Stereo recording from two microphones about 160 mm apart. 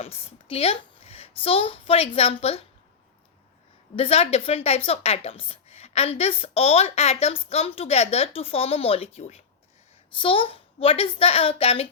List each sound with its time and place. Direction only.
0.0 s a child's voice: 40° left (ahead or behind)
3.9 s a woman's voice: 35° left (ahead or behind)